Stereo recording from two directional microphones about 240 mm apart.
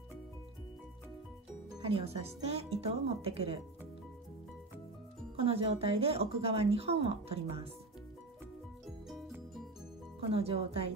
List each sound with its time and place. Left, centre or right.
1.8 s a woman's voice: right
5.4 s a woman's voice: right
10.3 s a woman's voice: right